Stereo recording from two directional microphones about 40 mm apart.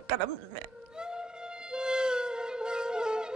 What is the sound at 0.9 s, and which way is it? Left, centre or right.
Music, right.